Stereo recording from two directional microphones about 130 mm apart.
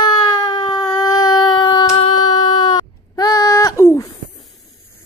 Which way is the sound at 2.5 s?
30° left (ahead or behind).